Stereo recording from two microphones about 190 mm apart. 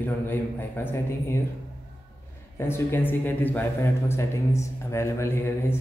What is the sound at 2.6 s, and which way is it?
A man's voice, 10° left (ahead or behind).